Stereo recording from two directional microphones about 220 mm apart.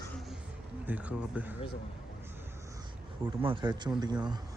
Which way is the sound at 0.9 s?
5° right (ahead or behind).